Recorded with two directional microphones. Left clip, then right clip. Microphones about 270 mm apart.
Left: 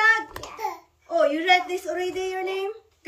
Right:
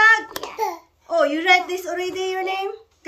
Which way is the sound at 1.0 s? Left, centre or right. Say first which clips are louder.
Right 3 dB; centre.